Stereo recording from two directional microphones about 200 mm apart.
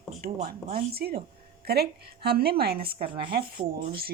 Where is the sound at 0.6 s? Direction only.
45° right (ahead or behind).